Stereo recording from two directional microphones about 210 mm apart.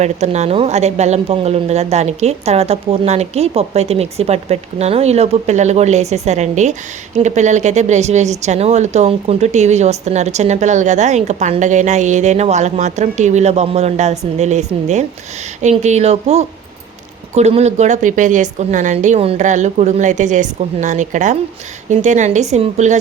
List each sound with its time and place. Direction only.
0.0 s speech: 30° right (ahead or behind)